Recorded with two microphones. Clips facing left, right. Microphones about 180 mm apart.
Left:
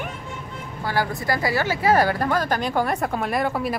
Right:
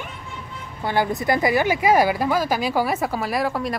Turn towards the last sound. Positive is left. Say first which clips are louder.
# even
turn(degrees=0)  # may be behind; listen again after turning